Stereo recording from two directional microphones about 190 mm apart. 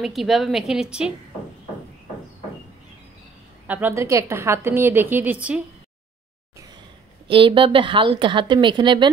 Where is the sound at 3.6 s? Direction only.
10° right (ahead or behind).